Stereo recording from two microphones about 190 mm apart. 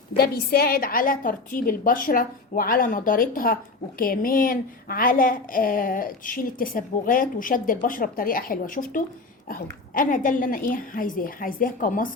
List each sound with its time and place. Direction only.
0.2 s a woman's voice: 55° left (ahead or behind)